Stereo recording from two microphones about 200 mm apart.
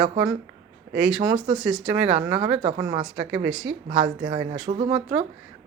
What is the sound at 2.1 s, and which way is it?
Speech, 30° right (ahead or behind).